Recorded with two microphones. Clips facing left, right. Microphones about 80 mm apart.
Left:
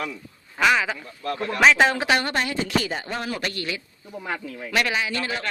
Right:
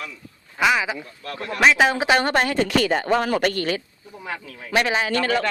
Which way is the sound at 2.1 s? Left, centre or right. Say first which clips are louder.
Right 5 dB; right.